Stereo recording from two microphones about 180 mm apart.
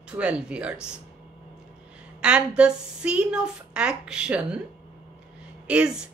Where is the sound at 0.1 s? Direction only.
5° right (ahead or behind).